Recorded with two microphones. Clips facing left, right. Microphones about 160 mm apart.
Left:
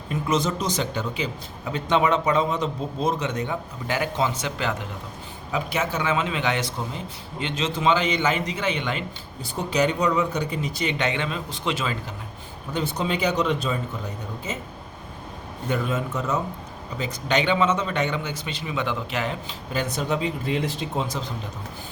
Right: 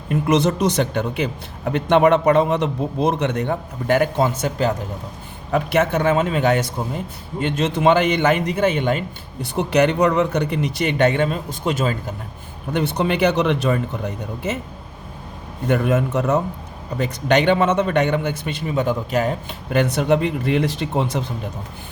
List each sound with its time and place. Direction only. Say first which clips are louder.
0.1 s speech: right 6 dB; 65° right (ahead or behind); by 4.9 s 40° right (ahead or behind)
5.5 s a man's voice: right 8 dB; 60° right (ahead or behind)
9.6 s speech: right 6 dB; 65° right (ahead or behind); by 12.1 s 45° right (ahead or behind)
12.7 s speech: right 6 dB; 65° right (ahead or behind)
15.6 s speech: right 7 dB; 65° right (ahead or behind)
18.6 s a man's voice: right 7 dB; 40° right (ahead or behind)
19.7 s speech: right 8 dB; 65° right (ahead or behind)